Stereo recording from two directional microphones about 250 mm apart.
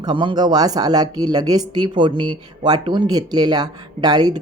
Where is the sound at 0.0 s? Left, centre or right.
Centre.